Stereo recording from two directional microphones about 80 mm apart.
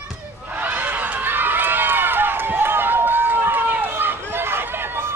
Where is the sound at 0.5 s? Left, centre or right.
Right.